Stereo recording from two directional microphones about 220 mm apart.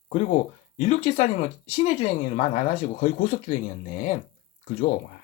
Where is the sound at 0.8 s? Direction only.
30° left (ahead or behind).